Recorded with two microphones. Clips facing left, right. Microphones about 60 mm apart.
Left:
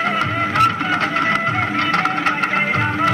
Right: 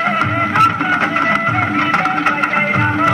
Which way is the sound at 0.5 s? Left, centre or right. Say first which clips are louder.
Right 3 dB; centre.